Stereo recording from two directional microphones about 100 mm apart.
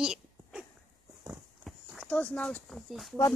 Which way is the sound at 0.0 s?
5° right (ahead or behind).